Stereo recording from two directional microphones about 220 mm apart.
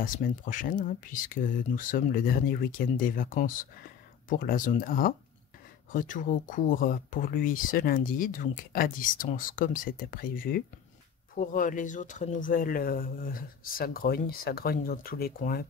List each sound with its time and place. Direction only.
0.0 s speech: 40° left (ahead or behind)